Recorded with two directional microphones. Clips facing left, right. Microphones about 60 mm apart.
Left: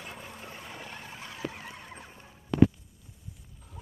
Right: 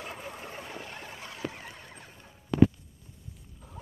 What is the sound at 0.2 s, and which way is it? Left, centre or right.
Boat, right.